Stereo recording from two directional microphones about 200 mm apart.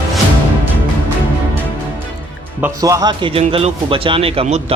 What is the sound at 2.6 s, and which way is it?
Speech, 15° right (ahead or behind).